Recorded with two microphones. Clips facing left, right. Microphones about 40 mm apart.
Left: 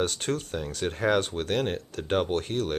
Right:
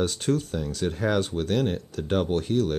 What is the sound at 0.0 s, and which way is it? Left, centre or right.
Speech, left.